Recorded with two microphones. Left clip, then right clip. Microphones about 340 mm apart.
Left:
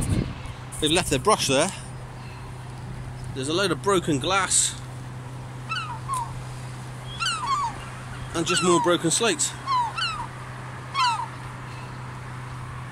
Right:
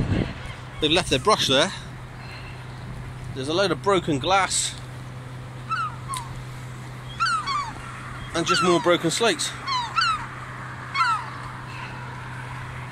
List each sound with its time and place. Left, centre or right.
0.7 s speech: centre
3.3 s speech: centre
6.1 s dog: left
8.3 s speech: centre
9.7 s dog: left
10.9 s a sound: left